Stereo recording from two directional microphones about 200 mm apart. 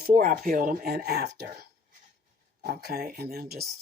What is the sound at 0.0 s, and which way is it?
Speech, 45° right (ahead or behind).